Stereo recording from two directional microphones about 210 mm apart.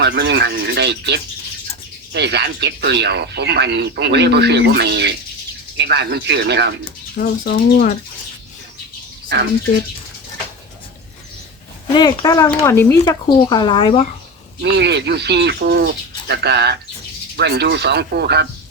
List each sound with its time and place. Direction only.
0.0 s speech: 55° right (ahead or behind)
7.2 s speech: 45° left (ahead or behind)
11.9 s speech: 20° left (ahead or behind)
14.6 s speech: 55° right (ahead or behind)